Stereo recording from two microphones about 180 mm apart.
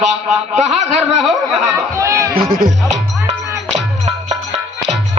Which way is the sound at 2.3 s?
55° right (ahead or behind).